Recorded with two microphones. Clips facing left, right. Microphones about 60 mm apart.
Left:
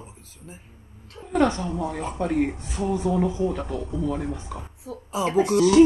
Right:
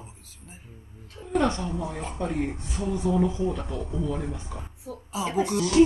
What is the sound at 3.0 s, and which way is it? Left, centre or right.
Speech, left.